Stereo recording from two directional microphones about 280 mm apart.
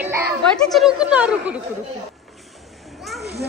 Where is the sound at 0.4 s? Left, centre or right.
Centre.